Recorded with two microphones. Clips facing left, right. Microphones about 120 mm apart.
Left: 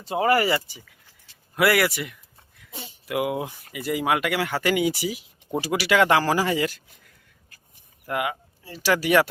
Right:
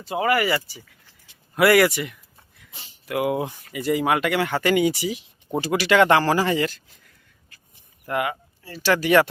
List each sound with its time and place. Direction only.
0.1 s speech: 35° left (ahead or behind)
1.5 s speech: centre (ahead or behind)
8.0 s speech: 5° left (ahead or behind)